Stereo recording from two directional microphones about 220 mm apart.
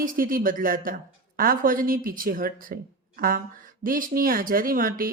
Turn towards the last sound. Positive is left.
turn(degrees=-40)  # may be behind; listen again after turning